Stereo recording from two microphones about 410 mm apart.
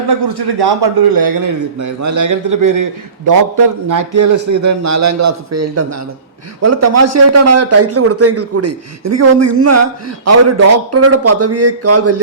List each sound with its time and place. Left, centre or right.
0.1 s a man's voice: right